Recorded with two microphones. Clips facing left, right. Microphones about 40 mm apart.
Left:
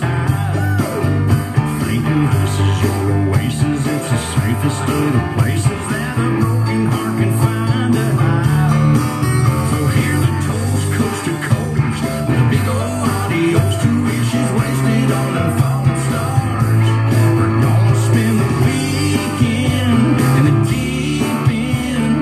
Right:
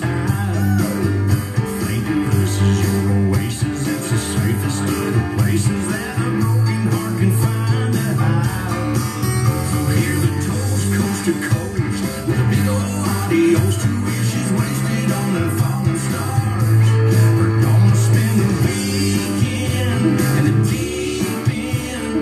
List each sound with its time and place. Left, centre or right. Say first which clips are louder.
7.9 s music: left 4 dB; left
13.3 s music: right 4 dB; left
18.1 s music: left 3 dB; left